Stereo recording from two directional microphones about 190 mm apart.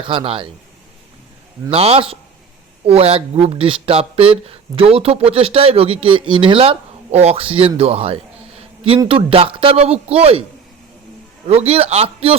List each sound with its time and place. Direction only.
0.0 s speech: 25° right (ahead or behind)
1.7 s a man's voice: 30° right (ahead or behind)
11.4 s a man's voice: 30° right (ahead or behind)